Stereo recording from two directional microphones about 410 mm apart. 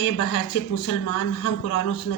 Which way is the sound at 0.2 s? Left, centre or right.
Left.